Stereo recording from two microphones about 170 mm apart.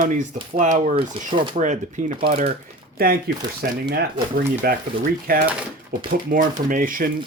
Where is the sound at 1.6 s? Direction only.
45° right (ahead or behind).